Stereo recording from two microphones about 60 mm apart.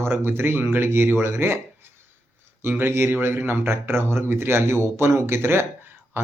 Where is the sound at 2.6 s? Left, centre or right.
Right.